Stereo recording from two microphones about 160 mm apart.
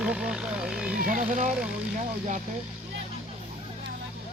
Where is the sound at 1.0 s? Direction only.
55° right (ahead or behind).